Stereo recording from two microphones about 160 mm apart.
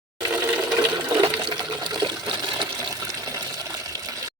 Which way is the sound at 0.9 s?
25° right (ahead or behind).